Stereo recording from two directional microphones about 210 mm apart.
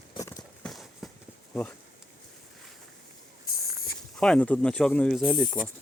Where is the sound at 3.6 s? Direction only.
45° left (ahead or behind).